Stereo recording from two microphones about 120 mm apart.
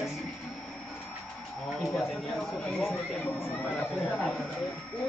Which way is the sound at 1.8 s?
Centre (ahead or behind).